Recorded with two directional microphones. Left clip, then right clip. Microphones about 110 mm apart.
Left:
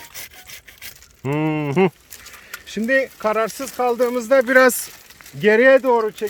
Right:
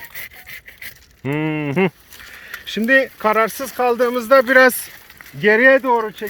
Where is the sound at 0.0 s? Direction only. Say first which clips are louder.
Right 4 dB; 20° left (ahead or behind).